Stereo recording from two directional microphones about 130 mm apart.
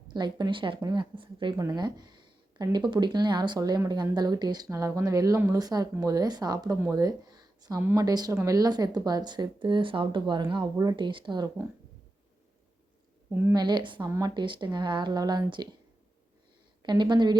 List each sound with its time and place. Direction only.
0.1 s speech: 35° right (ahead or behind)
6.9 s a sound: 30° right (ahead or behind)
7.9 s speech: 30° right (ahead or behind)
13.5 s speech: 35° right (ahead or behind)
16.8 s speech: 35° right (ahead or behind)